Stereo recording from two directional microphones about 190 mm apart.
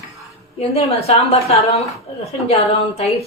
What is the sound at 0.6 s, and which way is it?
A woman's voice, 35° left (ahead or behind).